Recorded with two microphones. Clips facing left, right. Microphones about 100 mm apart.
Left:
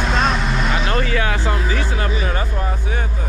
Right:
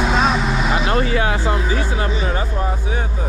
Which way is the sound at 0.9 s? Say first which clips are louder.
Right 2 dB; 30° right (ahead or behind).